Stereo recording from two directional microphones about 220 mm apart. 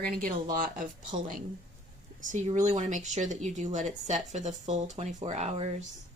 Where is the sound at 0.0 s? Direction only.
40° right (ahead or behind).